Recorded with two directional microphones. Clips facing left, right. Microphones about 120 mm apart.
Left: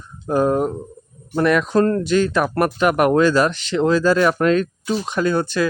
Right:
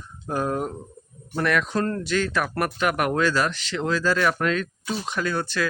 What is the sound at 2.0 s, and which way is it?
Speech, 20° left (ahead or behind).